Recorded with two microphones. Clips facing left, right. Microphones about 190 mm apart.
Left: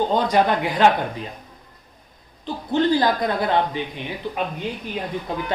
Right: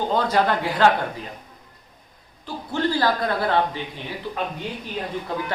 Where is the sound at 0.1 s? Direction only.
15° left (ahead or behind).